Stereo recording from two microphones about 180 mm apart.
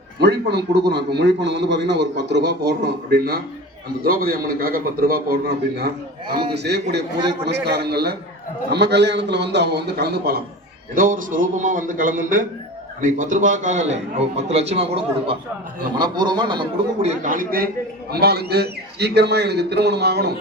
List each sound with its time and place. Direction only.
0.2 s a man's voice: 65° right (ahead or behind)
10.9 s a man's voice: 50° right (ahead or behind)
18.1 s a man's voice: 65° right (ahead or behind)